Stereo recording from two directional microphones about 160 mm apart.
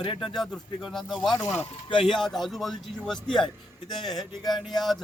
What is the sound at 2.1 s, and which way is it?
Speech, centre (ahead or behind).